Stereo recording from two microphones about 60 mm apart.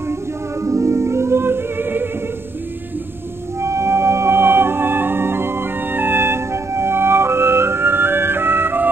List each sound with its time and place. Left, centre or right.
0.1 s music: right
3.6 s music: right